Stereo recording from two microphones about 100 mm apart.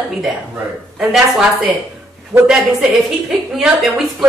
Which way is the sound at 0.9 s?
5° right (ahead or behind).